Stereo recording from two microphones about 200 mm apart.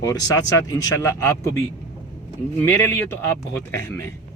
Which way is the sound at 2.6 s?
10° left (ahead or behind).